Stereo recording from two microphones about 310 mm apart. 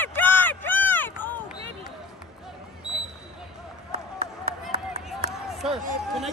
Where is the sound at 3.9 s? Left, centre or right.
Right.